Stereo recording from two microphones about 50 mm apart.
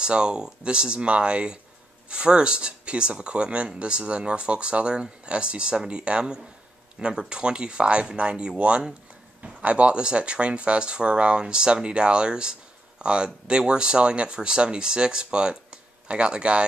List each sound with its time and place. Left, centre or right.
0.0 s speech: centre